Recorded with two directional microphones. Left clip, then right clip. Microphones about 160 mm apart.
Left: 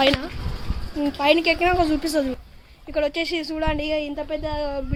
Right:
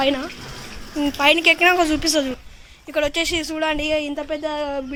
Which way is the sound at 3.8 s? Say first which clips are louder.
Right 3 dB; 30° right (ahead or behind).